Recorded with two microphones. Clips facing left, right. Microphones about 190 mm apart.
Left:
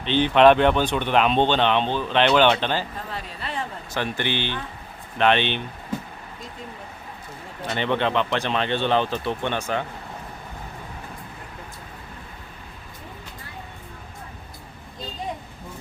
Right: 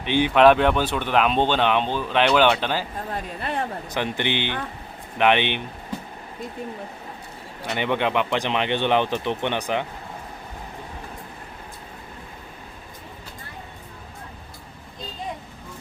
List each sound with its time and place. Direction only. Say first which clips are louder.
0.0 s speech: even; 10° right (ahead or behind)
3.1 s speech: right 4 dB; 50° right (ahead or behind)
3.9 s speech: even; 20° right (ahead or behind)
7.8 s speech: even; 15° right (ahead or behind)